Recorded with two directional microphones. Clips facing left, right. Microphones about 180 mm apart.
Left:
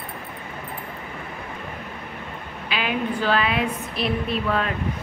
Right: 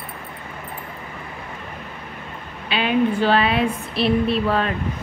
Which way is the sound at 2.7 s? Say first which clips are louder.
Right 6 dB; 25° right (ahead or behind).